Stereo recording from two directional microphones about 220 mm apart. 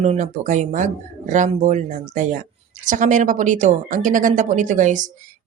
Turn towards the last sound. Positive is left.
turn(degrees=-35)  # may be behind; listen again after turning